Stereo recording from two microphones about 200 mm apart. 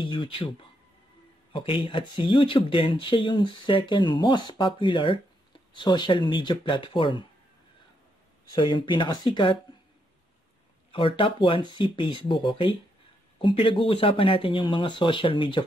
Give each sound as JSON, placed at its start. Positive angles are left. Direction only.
{"t": 0.0, "sound": "speech", "side_deg": 25}
{"t": 1.5, "sound": "speech", "side_deg": 25}
{"t": 8.5, "sound": "speech", "side_deg": 25}
{"t": 10.9, "sound": "speech", "side_deg": 25}